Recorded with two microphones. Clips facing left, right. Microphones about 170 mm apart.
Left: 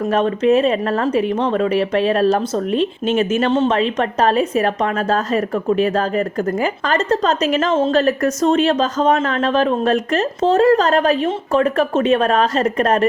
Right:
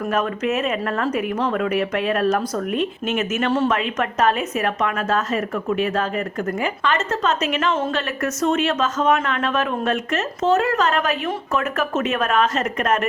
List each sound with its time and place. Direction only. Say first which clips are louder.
0.0 s a woman's voice: left 6 dB; 30° left (ahead or behind)